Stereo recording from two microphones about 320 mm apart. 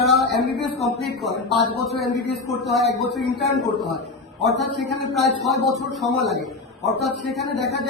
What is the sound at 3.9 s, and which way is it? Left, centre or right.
A man's voice, centre.